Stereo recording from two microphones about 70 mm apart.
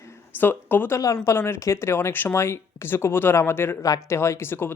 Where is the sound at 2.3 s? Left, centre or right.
Left.